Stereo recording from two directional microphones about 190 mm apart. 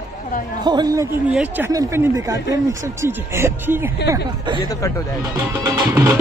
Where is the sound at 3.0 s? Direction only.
10° right (ahead or behind).